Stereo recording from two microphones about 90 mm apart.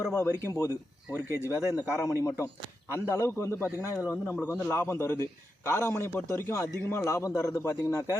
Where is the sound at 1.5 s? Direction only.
30° right (ahead or behind).